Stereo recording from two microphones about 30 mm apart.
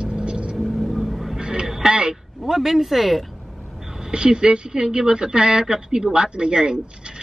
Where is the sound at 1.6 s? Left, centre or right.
Centre.